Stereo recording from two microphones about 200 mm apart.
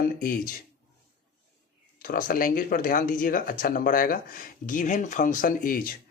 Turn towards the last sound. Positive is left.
turn(degrees=45)  # may be behind; listen again after turning